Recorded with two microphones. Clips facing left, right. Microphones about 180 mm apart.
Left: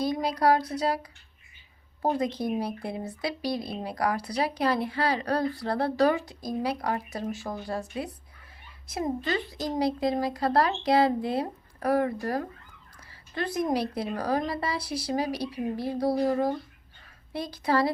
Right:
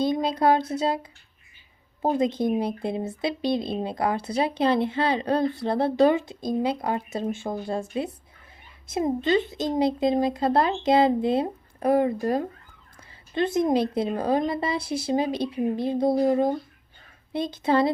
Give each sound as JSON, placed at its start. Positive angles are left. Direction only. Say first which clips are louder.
{"t": 0.0, "sound": "speech", "louder": "right 3 dB", "side_deg": -25}